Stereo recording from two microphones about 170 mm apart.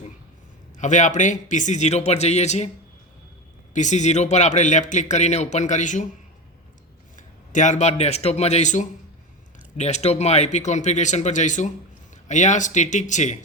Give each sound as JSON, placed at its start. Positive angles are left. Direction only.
{"t": 0.8, "sound": "speech", "side_deg": 45}
{"t": 3.8, "sound": "speech", "side_deg": 45}
{"t": 7.2, "sound": "speech", "side_deg": 45}